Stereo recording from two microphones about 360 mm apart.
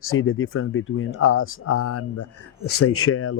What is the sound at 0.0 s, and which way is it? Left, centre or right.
Speech, left.